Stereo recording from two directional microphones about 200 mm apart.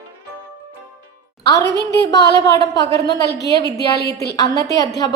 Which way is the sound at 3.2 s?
55° left (ahead or behind).